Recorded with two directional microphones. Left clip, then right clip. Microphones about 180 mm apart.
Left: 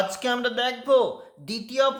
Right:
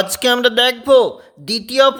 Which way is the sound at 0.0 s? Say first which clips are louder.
Right 10 dB; 50° right (ahead or behind).